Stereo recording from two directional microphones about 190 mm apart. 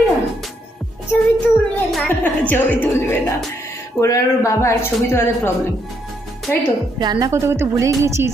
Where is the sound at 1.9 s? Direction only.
10° left (ahead or behind).